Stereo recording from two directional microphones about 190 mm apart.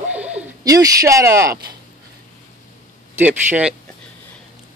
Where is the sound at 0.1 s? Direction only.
5° right (ahead or behind).